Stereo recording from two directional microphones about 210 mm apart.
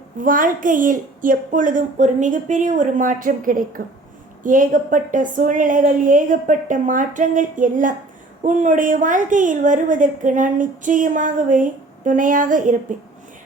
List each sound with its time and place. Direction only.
0.2 s a woman's voice: 40° right (ahead or behind)